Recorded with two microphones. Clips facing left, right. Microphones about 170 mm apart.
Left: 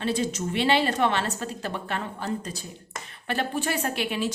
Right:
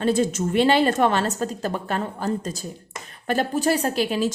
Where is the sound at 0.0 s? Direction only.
50° right (ahead or behind).